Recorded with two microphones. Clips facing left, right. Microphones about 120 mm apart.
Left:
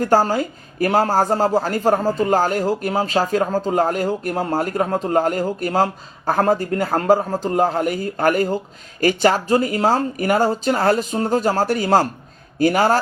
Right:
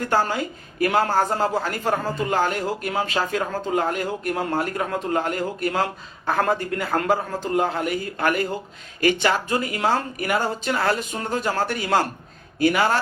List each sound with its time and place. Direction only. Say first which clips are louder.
0.1 s a man's voice: left 4 dB; 40° left (ahead or behind)